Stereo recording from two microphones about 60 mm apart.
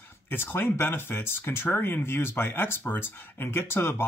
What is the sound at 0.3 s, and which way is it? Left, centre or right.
Speech, left.